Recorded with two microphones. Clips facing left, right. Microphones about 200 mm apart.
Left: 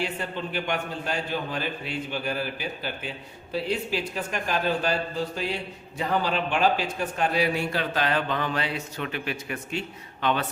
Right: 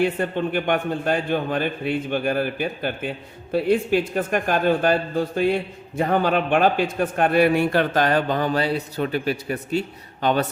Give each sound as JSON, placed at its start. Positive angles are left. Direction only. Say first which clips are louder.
{"t": 0.0, "sound": "a man's voice", "louder": "right 9 dB", "side_deg": -55}